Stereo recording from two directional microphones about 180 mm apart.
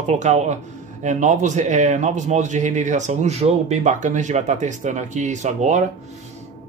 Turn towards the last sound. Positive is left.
turn(degrees=-40)  # may be behind; listen again after turning